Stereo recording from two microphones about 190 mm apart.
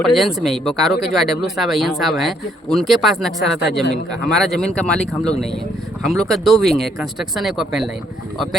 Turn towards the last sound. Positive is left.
turn(degrees=0)  # may be behind; listen again after turning